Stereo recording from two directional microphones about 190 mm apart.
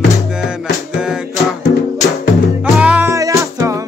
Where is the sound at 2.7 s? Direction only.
5° right (ahead or behind).